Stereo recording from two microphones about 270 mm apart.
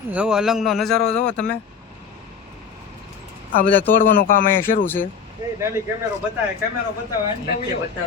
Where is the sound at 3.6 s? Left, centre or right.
Centre.